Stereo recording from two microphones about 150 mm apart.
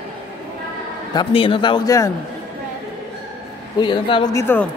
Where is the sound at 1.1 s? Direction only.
35° left (ahead or behind).